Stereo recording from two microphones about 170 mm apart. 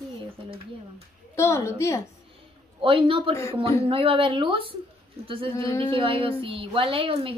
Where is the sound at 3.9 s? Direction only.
30° right (ahead or behind).